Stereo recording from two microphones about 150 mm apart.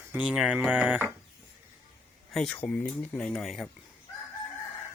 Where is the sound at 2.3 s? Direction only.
5° left (ahead or behind).